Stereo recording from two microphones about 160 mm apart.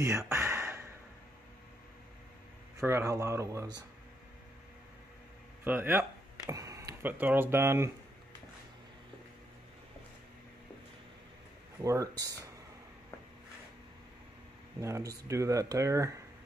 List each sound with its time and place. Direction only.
0.3 s a sound: 15° right (ahead or behind)
2.8 s speech: 15° right (ahead or behind)
5.6 s speech: 10° right (ahead or behind)
11.8 s speech: 20° right (ahead or behind)
14.8 s speech: 20° right (ahead or behind)